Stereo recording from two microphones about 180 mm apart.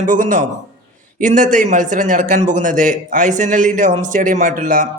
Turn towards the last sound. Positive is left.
turn(degrees=-45)  # may be behind; listen again after turning